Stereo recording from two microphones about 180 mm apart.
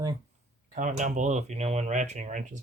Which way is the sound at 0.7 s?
45° right (ahead or behind).